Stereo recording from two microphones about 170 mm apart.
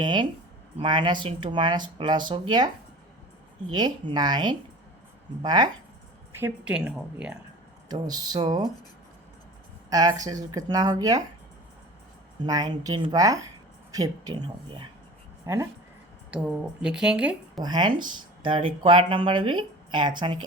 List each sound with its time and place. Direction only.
0.0 s speech: 25° right (ahead or behind)
3.7 s speech: 25° right (ahead or behind)
6.4 s speech: 5° right (ahead or behind)
7.9 s speech: 25° right (ahead or behind)
9.9 s speech: 20° right (ahead or behind)
12.4 s speech: 25° right (ahead or behind)
16.3 s speech: 5° right (ahead or behind)
17.6 s speech: 25° right (ahead or behind)